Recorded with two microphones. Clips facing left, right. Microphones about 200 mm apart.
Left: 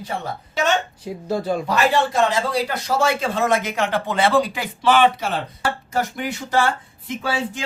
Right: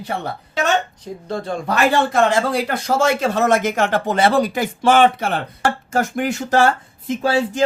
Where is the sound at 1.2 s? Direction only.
5° left (ahead or behind).